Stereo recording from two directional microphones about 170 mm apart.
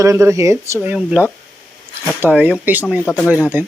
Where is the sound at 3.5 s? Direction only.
10° right (ahead or behind).